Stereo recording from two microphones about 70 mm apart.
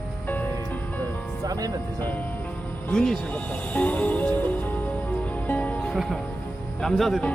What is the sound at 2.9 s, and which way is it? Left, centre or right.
Speech, centre.